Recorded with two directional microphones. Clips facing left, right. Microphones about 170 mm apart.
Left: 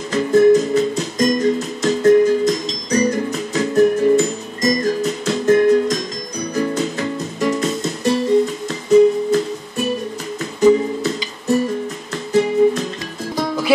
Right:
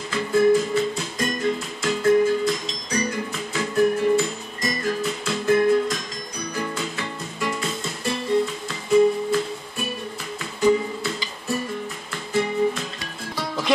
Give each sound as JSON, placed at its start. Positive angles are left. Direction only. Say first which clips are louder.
{"t": 0.1, "sound": "music", "louder": "left 6 dB", "side_deg": 40}
{"t": 12.3, "sound": "music", "louder": "left 8 dB", "side_deg": 40}